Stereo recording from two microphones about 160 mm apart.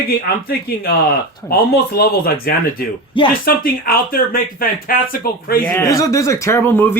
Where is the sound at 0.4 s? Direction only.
70° left (ahead or behind).